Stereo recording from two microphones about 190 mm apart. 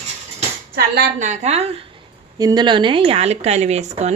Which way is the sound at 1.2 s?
40° right (ahead or behind).